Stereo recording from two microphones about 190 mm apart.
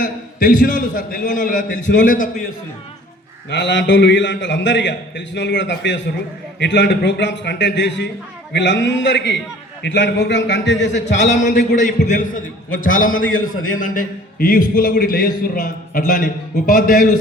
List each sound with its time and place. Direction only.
0.0 s a man's voice: 45° left (ahead or behind)
3.5 s a man's voice: 70° left (ahead or behind)
11.2 s a man's voice: 40° left (ahead or behind)